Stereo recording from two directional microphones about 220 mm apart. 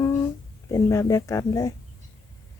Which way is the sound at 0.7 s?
15° left (ahead or behind).